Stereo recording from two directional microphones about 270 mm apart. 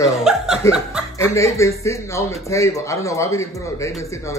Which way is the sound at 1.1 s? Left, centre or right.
Centre.